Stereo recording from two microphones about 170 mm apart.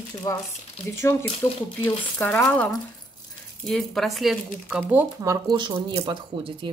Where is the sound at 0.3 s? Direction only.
20° left (ahead or behind); by 5.0 s 5° right (ahead or behind).